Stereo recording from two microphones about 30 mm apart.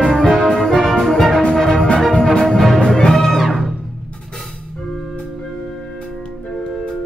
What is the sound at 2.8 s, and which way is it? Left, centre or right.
Music, centre.